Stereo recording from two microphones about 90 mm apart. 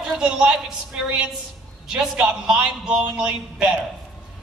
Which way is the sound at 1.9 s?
10° right (ahead or behind).